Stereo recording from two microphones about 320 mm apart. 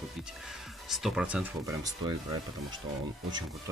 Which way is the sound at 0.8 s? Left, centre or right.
Centre.